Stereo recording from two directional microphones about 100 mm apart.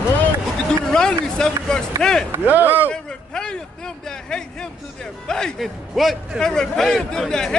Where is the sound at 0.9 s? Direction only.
5° left (ahead or behind).